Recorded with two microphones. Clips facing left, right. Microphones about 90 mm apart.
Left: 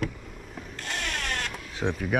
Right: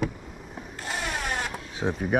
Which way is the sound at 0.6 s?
5° right (ahead or behind).